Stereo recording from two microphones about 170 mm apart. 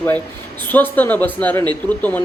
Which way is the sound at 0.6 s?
10° left (ahead or behind).